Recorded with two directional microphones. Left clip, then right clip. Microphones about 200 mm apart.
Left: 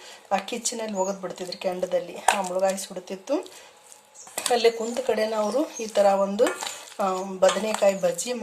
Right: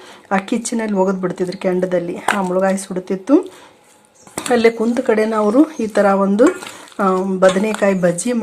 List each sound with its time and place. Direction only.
0.3 s speech: 15° right (ahead or behind)